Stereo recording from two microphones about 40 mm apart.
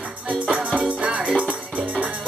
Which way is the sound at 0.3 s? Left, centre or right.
Right.